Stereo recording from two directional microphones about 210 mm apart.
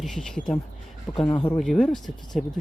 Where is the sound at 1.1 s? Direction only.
20° left (ahead or behind).